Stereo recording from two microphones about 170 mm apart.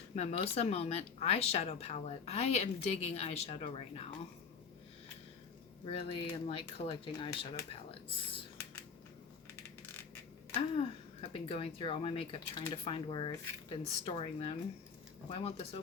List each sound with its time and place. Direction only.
0.2 s speech: 35° left (ahead or behind)
5.8 s speech: 35° left (ahead or behind)
10.5 s speech: 35° left (ahead or behind)